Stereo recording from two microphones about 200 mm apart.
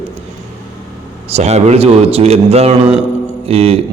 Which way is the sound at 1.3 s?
35° right (ahead or behind).